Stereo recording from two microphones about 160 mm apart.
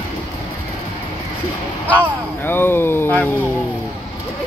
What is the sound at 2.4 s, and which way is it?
Speech, 15° left (ahead or behind).